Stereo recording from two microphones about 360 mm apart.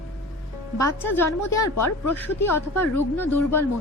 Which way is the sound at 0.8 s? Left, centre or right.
Centre.